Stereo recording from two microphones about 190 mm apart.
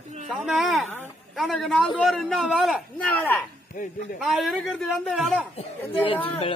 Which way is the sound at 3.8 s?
45° left (ahead or behind).